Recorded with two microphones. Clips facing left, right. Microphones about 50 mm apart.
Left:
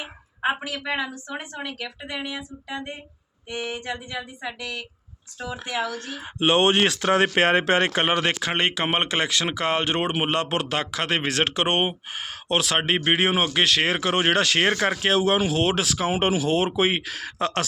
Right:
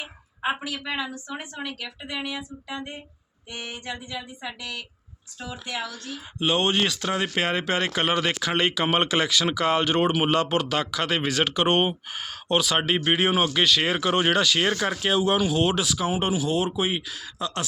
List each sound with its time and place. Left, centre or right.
0.0 s a sound: left
0.8 s speech: left
1.5 s speech: centre
2.3 s a sound: centre
5.6 s speech: left
13.0 s speech: left